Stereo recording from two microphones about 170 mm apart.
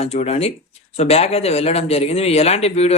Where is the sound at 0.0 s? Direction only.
35° left (ahead or behind).